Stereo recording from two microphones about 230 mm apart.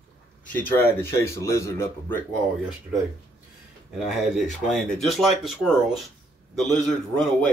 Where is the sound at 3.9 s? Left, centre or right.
Centre.